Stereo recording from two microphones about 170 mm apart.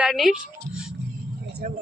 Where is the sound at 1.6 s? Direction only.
55° right (ahead or behind).